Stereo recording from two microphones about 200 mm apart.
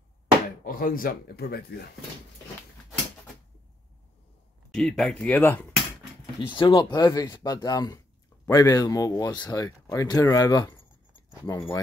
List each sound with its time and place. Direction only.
0.7 s speech: 45° left (ahead or behind)
4.6 s speech: centre (ahead or behind)
6.4 s speech: 25° left (ahead or behind)